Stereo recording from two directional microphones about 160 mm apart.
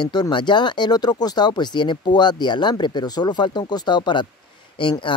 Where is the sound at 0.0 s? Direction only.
25° left (ahead or behind).